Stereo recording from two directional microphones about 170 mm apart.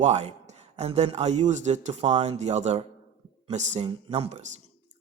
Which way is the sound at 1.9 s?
25° right (ahead or behind).